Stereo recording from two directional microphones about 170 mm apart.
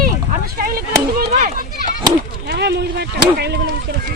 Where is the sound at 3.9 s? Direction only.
90° right.